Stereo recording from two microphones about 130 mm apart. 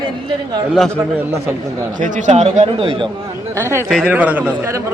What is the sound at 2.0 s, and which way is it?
Speech, 75° right (ahead or behind).